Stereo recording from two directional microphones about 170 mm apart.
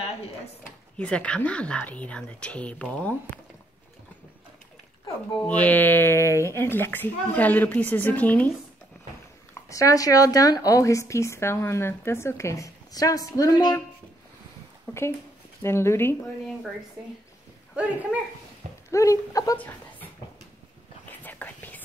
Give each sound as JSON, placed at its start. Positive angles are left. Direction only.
{"t": 0.9, "sound": "speech", "side_deg": 5}
{"t": 5.0, "sound": "speech", "side_deg": 10}
{"t": 9.5, "sound": "speech", "side_deg": 20}
{"t": 15.6, "sound": "speech", "side_deg": 15}
{"t": 18.1, "sound": "speech", "side_deg": -5}
{"t": 18.9, "sound": "speech", "side_deg": 20}
{"t": 21.1, "sound": "whispering", "side_deg": 10}